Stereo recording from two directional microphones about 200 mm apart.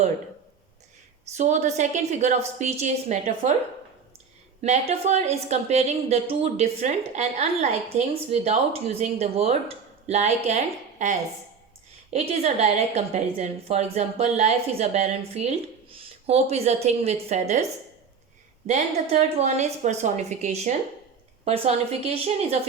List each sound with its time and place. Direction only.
1.4 s a woman's voice: 35° right (ahead or behind)
4.6 s a woman's voice: 35° right (ahead or behind)
18.7 s a woman's voice: 35° right (ahead or behind)
22.0 s a woman's voice: 30° right (ahead or behind)